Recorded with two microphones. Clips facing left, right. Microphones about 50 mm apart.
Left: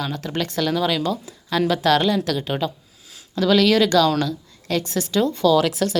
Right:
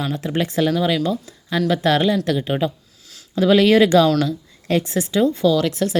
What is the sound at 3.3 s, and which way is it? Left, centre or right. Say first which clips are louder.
Speech: right 3 dB; right.